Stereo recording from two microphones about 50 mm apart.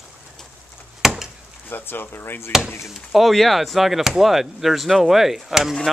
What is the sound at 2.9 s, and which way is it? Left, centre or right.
Speech, centre.